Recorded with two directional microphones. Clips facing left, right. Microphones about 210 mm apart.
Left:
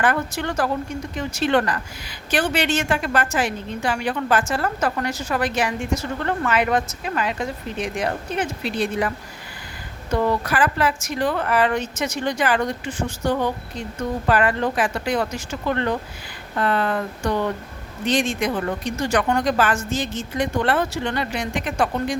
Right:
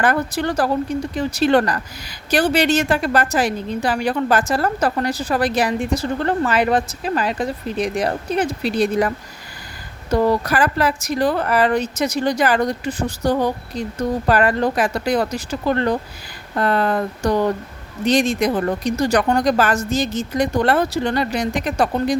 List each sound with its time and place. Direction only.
0.0 s a woman's voice: 35° right (ahead or behind)